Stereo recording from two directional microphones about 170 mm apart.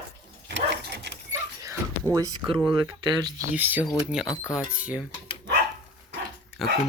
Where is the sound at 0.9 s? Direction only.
90° right.